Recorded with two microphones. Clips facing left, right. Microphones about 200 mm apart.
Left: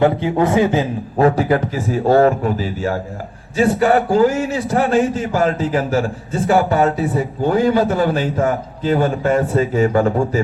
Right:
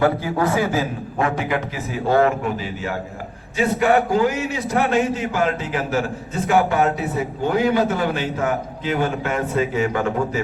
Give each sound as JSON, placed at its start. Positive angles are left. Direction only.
{"t": 0.0, "sound": "a man's voice", "side_deg": 25}
{"t": 1.4, "sound": "a man's voice", "side_deg": 40}